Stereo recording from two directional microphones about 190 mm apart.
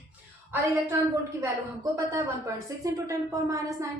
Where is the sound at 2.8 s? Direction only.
15° right (ahead or behind).